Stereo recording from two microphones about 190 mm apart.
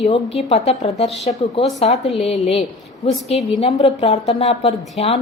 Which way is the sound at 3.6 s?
35° left (ahead or behind).